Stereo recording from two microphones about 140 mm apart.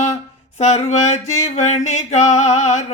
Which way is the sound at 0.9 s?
55° left (ahead or behind).